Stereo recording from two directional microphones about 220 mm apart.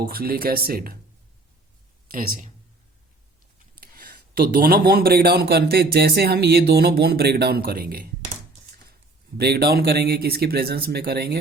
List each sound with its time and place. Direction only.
0.1 s a man's voice: 40° right (ahead or behind)
2.0 s speech: 40° right (ahead or behind)
3.8 s a man's voice: 45° right (ahead or behind)
9.4 s a man's voice: 45° right (ahead or behind)